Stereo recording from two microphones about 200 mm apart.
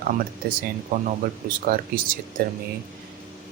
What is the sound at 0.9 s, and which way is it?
Speech, 45° right (ahead or behind).